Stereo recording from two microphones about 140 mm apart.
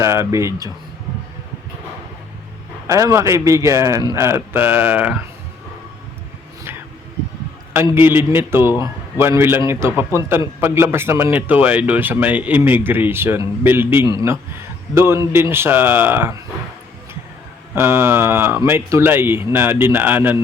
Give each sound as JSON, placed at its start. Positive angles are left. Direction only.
{"t": 0.0, "sound": "a man's voice", "side_deg": -20}
{"t": 2.8, "sound": "a man's voice", "side_deg": -20}
{"t": 7.7, "sound": "a man's voice", "side_deg": -15}
{"t": 17.7, "sound": "a man's voice", "side_deg": -15}